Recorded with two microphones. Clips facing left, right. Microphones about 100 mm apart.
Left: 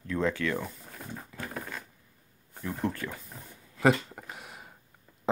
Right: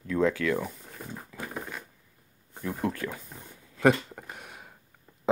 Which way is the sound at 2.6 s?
Centre (ahead or behind).